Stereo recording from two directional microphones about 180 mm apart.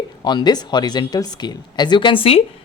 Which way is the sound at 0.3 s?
25° left (ahead or behind).